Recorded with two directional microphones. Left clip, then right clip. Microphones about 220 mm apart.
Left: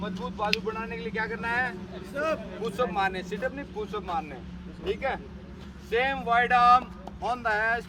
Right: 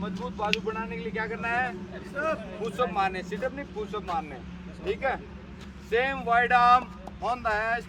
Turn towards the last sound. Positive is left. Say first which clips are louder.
# left 1 dB
turn(degrees=-5)  # may be behind; listen again after turning